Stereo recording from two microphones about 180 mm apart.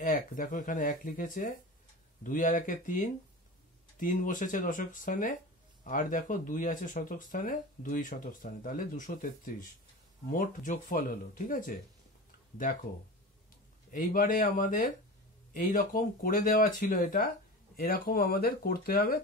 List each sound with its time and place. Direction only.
0.0 s speech: 50° left (ahead or behind)
13.9 s speech: 50° left (ahead or behind)